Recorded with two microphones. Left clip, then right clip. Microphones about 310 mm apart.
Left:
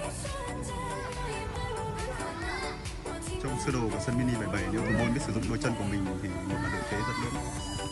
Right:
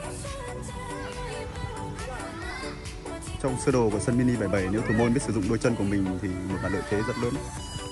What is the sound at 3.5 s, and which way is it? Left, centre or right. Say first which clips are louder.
Speech: right 8 dB; centre.